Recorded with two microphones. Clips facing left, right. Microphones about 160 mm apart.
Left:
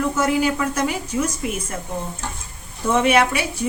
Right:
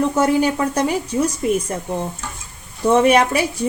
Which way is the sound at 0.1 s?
35° right (ahead or behind).